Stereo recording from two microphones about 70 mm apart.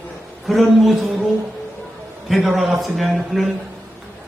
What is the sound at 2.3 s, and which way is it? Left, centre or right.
A man's voice, centre.